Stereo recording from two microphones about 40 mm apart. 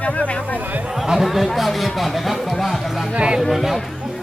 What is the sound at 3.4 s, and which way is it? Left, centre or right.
Speech, centre.